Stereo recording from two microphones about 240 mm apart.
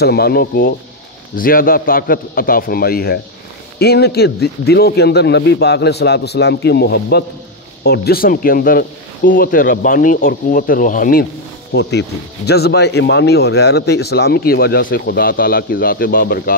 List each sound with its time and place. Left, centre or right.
0.0 s speech: left